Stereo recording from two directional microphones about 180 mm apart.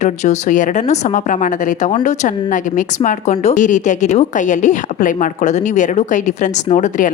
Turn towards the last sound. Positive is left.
turn(degrees=45)  # may be behind; listen again after turning